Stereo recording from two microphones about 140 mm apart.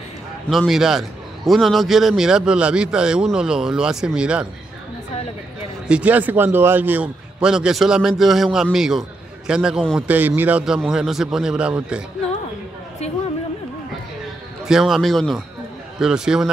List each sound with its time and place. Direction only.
0.5 s a man's voice: centre (ahead or behind)
5.9 s a man's voice: 10° right (ahead or behind)
13.0 s a woman's voice: 50° left (ahead or behind)
14.7 s a man's voice: 5° right (ahead or behind)